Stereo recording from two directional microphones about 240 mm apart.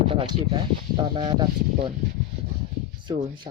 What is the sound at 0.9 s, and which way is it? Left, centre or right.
Speech, centre.